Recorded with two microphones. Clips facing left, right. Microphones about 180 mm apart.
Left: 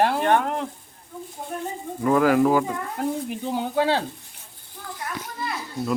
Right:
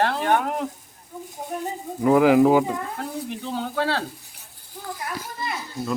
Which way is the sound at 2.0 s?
15° right (ahead or behind).